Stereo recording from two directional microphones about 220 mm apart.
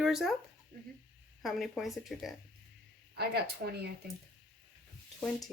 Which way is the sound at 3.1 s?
45° right (ahead or behind).